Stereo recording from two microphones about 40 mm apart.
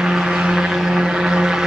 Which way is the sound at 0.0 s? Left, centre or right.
Centre.